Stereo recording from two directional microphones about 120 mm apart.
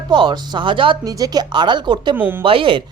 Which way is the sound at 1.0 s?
30° right (ahead or behind).